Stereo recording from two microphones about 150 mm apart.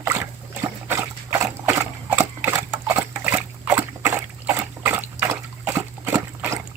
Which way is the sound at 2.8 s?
10° right (ahead or behind).